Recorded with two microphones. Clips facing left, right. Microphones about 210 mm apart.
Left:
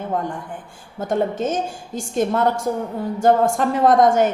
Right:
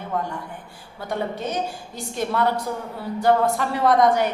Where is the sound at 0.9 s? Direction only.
45° left (ahead or behind).